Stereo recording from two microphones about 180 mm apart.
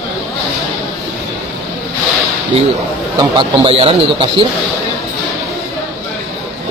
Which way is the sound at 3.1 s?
25° right (ahead or behind).